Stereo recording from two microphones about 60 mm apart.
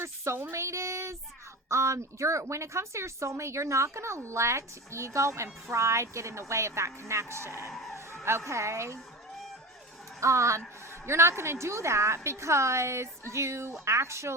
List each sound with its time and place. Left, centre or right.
0.0 s a sound: right
0.5 s speech: right
7.7 s speech: centre
8.2 s speech: right
10.2 s a woman's voice: right